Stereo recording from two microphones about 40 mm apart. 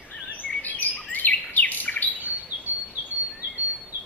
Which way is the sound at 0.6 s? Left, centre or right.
Left.